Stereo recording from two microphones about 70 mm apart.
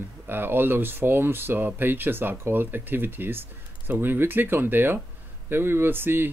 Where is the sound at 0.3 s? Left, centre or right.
Right.